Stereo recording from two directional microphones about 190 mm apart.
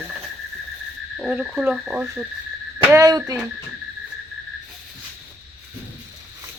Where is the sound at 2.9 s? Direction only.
20° right (ahead or behind).